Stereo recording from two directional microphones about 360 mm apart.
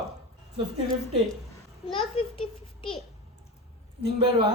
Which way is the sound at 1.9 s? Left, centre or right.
Centre.